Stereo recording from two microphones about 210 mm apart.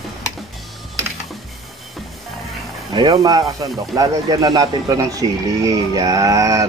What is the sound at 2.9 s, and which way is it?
Speech, 20° right (ahead or behind).